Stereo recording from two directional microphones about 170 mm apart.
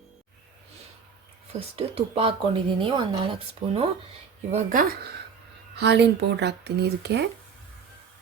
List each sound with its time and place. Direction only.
1.5 s speech: 35° right (ahead or behind)
4.5 s speech: 55° right (ahead or behind)
5.7 s speech: 80° right